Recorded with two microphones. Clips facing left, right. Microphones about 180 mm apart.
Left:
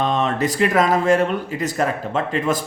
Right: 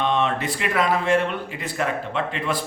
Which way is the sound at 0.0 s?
40° left (ahead or behind).